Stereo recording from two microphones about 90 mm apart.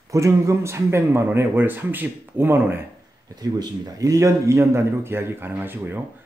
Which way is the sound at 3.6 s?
40° right (ahead or behind).